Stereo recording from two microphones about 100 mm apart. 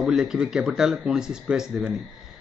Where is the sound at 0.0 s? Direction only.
5° right (ahead or behind).